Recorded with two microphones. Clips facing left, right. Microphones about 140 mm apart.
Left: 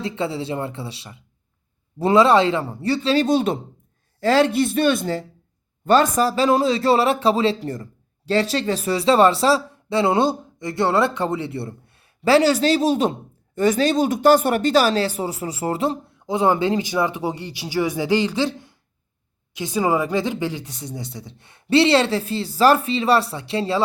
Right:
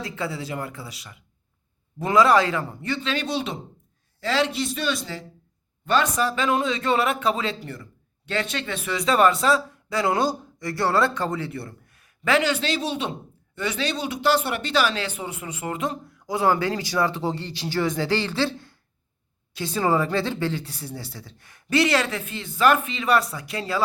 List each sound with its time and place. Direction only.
0.0 s a woman's voice: 25° left (ahead or behind)